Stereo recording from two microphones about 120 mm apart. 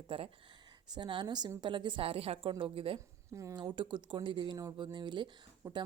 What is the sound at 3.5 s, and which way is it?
A woman's voice, 40° right (ahead or behind).